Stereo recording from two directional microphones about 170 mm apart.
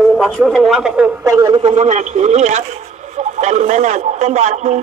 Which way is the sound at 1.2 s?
20° right (ahead or behind).